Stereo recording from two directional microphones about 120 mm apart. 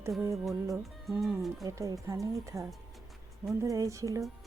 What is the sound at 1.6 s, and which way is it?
Speech, 30° right (ahead or behind).